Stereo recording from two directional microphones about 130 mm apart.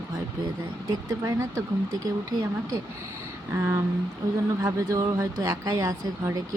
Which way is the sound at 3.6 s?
20° right (ahead or behind).